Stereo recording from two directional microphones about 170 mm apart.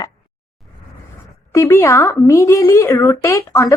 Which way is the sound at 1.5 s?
15° left (ahead or behind).